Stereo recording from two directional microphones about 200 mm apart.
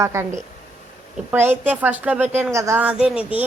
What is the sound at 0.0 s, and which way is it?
A woman's voice, 15° right (ahead or behind).